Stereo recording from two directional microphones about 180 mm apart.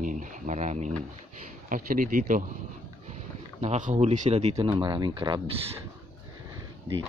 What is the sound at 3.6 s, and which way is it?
Speech, 40° right (ahead or behind).